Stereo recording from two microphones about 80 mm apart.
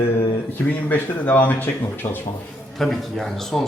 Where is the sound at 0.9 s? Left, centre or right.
Left.